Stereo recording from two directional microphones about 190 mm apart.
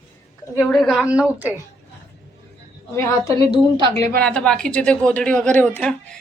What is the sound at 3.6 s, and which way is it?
Speech, 25° right (ahead or behind).